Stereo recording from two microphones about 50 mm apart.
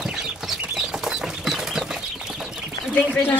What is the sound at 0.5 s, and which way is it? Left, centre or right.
Bird flight, centre.